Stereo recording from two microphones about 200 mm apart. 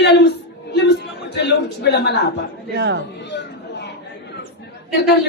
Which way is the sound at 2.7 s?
60° right (ahead or behind).